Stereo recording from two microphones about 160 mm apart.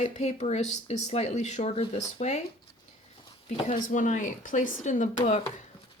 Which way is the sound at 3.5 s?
45° left (ahead or behind).